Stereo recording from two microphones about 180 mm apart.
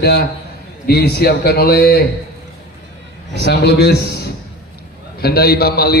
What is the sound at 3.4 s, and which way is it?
A man's voice, 65° left (ahead or behind).